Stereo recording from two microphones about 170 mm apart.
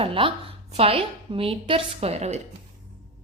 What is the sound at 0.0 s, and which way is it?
A woman's voice, 30° right (ahead or behind).